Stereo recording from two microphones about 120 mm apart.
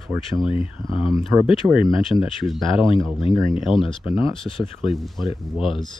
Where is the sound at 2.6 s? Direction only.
45° left (ahead or behind).